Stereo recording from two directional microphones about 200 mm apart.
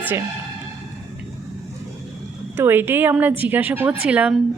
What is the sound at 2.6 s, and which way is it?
A woman's voice, 10° right (ahead or behind).